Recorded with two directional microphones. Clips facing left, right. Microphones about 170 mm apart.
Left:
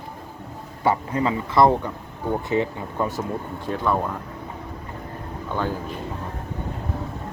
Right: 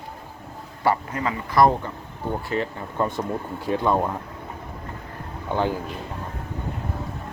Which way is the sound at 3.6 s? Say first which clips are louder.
Right 2 dB; 15° right (ahead or behind).